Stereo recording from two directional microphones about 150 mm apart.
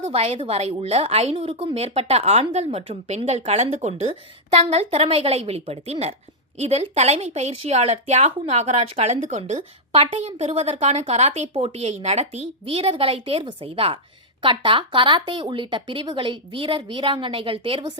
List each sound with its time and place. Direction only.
0.1 s a woman's voice: 40° right (ahead or behind)